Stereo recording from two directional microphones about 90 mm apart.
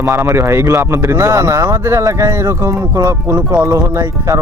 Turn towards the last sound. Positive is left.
turn(degrees=-35)  # may be behind; listen again after turning